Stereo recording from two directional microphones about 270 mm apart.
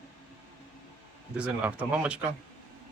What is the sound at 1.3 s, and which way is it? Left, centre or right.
Speech, centre.